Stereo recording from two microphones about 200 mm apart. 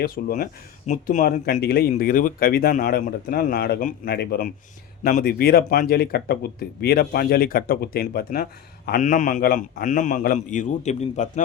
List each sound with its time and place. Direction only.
0.0 s a man's voice: 45° left (ahead or behind)